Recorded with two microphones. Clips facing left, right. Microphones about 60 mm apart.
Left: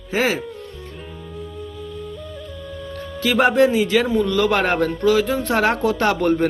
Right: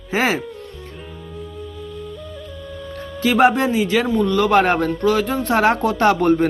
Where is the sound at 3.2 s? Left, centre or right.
Centre.